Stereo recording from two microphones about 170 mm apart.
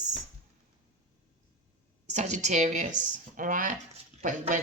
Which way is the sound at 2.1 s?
45° right (ahead or behind).